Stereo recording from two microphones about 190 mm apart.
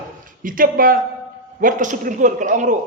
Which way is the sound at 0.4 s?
45° right (ahead or behind).